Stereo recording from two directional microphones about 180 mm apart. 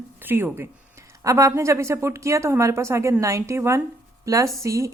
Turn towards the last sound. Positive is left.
turn(degrees=-15)  # may be behind; listen again after turning